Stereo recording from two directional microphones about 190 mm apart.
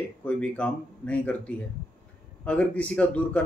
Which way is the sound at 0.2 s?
5° left (ahead or behind).